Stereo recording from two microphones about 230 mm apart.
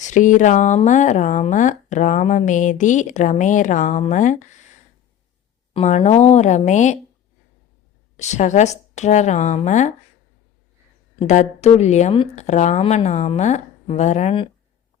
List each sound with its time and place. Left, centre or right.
0.0 s speech: left
5.7 s speech: left
8.1 s speech: left
11.2 s speech: left